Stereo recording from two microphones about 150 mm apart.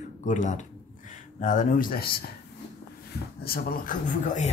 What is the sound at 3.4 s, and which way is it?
Speech, 80° left.